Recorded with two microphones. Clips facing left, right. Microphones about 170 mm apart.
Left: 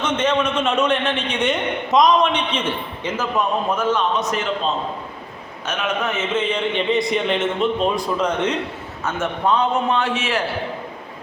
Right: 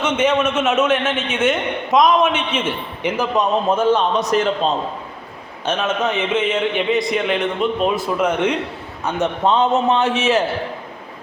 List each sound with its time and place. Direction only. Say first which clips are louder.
0.0 s a man's voice: right 2 dB; 10° right (ahead or behind)
3.7 s a man's voice: right 4 dB; 30° right (ahead or behind)
5.6 s a man's voice: right 4 dB; 30° right (ahead or behind)